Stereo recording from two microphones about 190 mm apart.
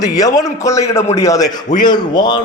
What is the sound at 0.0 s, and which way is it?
A man's voice, 20° left (ahead or behind).